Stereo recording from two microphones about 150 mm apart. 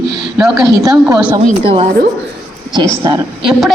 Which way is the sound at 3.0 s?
25° right (ahead or behind).